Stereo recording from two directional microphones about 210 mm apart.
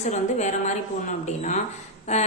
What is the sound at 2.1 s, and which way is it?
Speech, 35° left (ahead or behind).